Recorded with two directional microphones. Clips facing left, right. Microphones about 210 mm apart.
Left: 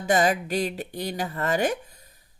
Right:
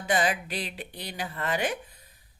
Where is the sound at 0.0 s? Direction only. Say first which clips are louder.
Left 5 dB; 45° left (ahead or behind).